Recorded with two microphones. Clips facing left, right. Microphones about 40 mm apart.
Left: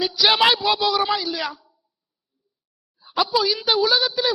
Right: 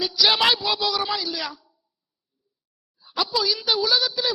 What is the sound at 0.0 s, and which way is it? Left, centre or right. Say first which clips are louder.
A woman's voice: left 2 dB; centre.